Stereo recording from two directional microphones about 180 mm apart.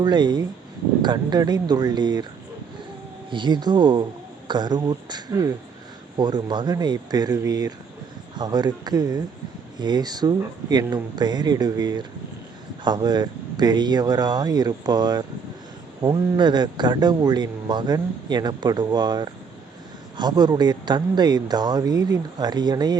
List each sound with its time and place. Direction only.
0.0 s a man's voice: 25° right (ahead or behind)
3.2 s a man's voice: 25° right (ahead or behind)